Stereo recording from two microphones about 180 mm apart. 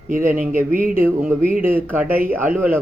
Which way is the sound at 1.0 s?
10° right (ahead or behind).